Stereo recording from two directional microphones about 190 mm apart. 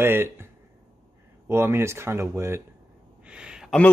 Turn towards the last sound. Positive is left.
turn(degrees=-5)  # may be behind; listen again after turning